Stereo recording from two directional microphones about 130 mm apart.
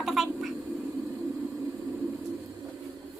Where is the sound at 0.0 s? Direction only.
Centre (ahead or behind).